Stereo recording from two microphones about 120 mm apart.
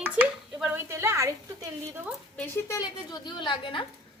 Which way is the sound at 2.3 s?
20° left (ahead or behind).